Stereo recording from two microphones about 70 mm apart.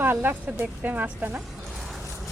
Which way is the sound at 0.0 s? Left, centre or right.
Right.